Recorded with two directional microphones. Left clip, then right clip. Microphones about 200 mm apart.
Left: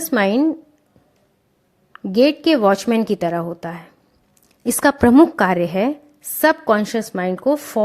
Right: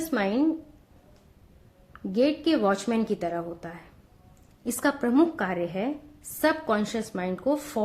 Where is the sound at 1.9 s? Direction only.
45° left (ahead or behind).